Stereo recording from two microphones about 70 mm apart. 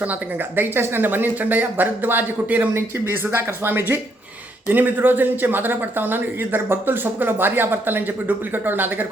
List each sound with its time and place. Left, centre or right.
0.0 s speech: right
2.7 s speech: right